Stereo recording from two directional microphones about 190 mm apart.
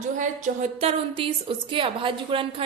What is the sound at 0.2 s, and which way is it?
A woman's voice, 40° right (ahead or behind).